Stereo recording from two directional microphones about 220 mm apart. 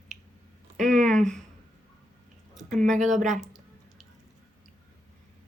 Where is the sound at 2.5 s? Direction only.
35° right (ahead or behind).